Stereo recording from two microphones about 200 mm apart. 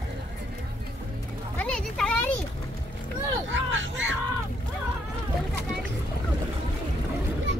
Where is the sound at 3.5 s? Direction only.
65° right (ahead or behind).